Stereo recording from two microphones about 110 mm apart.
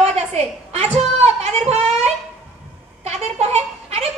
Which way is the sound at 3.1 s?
75° right (ahead or behind).